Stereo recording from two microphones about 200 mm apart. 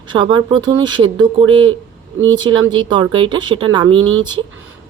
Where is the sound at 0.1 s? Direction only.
25° right (ahead or behind).